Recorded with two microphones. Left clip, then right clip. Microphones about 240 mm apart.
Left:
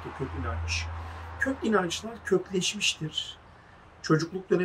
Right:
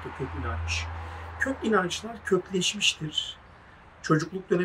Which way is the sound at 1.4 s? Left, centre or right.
Centre.